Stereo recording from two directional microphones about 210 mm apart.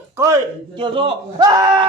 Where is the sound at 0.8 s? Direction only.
25° right (ahead or behind).